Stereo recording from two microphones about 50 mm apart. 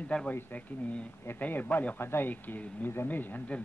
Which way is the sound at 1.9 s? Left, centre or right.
Left.